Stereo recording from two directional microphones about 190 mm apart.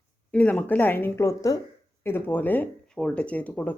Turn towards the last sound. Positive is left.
turn(degrees=10)  # may be behind; listen again after turning